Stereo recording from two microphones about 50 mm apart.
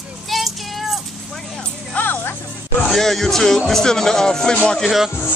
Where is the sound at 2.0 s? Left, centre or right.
Left.